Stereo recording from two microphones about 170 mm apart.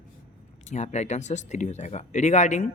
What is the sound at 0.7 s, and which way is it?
Speech, 45° left (ahead or behind).